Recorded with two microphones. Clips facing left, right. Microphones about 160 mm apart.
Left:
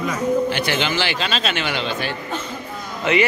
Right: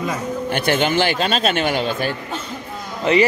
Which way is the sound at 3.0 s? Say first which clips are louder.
Right 3 dB; 35° right (ahead or behind).